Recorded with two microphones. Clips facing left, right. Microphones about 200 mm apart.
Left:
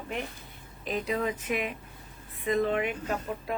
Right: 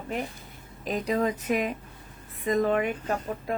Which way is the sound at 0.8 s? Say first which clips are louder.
Right 4 dB; 40° right (ahead or behind).